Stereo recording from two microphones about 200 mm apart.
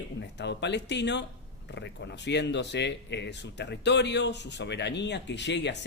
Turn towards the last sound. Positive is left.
turn(degrees=60)  # may be behind; listen again after turning